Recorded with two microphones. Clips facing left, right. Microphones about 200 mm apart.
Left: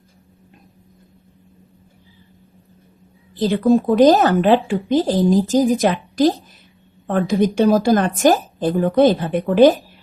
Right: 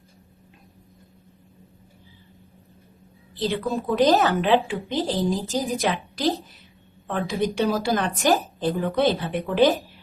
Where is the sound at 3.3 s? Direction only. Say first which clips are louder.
Left 10 dB; 45° left (ahead or behind).